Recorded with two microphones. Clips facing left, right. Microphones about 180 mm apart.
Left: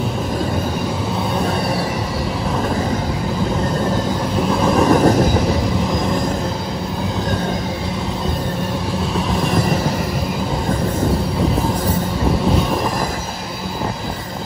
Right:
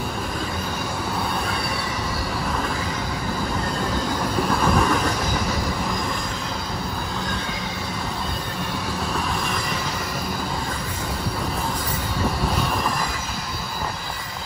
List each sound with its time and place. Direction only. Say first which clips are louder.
4.7 s train: left 8 dB; 35° left (ahead or behind)